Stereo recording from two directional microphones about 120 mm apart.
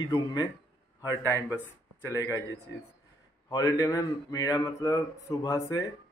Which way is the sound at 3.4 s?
30° left (ahead or behind).